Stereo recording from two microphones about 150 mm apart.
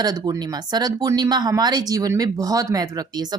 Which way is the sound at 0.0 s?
25° right (ahead or behind).